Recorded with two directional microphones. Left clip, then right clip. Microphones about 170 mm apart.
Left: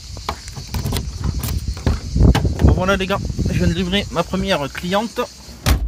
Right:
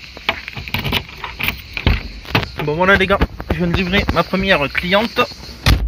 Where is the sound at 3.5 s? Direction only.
25° left (ahead or behind).